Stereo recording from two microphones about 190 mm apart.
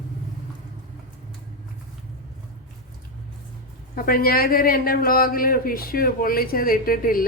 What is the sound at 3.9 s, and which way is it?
A man's voice, 50° left (ahead or behind).